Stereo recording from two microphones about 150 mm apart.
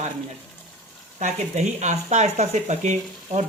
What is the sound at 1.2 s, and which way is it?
Speech, 50° right (ahead or behind).